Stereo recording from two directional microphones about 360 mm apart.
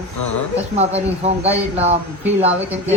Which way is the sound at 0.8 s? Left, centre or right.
Centre.